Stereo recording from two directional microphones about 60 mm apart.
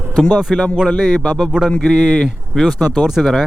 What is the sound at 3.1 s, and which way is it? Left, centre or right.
Speech, centre.